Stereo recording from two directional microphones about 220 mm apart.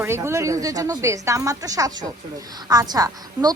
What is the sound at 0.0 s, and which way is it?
Speech, 10° right (ahead or behind).